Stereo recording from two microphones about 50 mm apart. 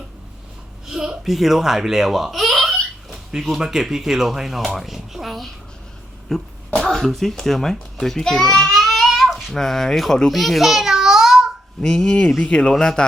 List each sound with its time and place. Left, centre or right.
0.9 s a sound: centre
1.2 s speech: centre
6.3 s speech: centre
8.7 s a sound: centre
9.6 s a child's voice: centre
11.8 s speech: centre
12.7 s speech: centre